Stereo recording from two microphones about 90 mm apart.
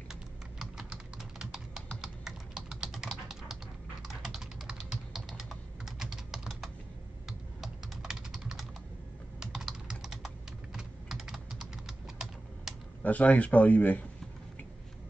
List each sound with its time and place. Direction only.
0.1 s typing: 5° right (ahead or behind)
7.2 s computer keyboard: 5° right (ahead or behind)
13.0 s speech: 15° left (ahead or behind)